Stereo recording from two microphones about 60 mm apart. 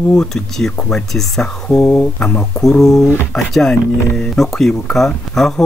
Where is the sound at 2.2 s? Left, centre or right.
Centre.